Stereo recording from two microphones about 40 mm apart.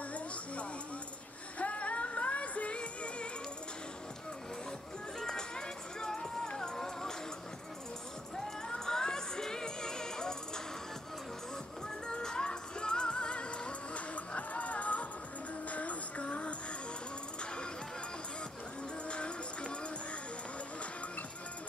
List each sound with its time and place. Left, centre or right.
1.6 s music: left
5.2 s music: centre
8.6 s music: centre
12.1 s music: centre
19.0 s music: left